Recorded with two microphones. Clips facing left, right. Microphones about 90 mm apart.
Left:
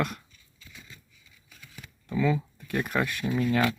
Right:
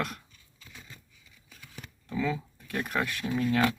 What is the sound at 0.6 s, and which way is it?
Scissors, 45° right (ahead or behind).